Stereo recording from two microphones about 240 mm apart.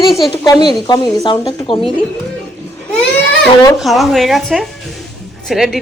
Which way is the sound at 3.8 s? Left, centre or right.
Centre.